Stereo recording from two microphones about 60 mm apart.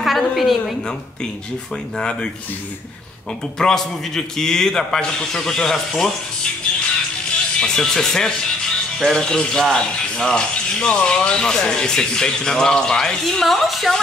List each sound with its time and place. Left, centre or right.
0.0 s a sound: centre
2.0 s speech: centre
3.5 s speech: centre
7.6 s a woman's voice: centre